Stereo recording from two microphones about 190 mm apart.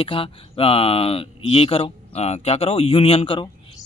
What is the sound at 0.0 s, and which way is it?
Speech, 30° left (ahead or behind).